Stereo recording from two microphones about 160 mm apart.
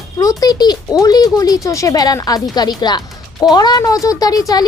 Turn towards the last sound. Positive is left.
turn(degrees=25)  # may be behind; listen again after turning